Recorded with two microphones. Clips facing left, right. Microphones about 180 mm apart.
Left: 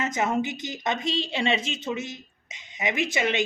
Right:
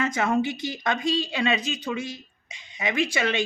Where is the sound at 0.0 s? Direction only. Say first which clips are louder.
Right 2 dB; 20° left (ahead or behind).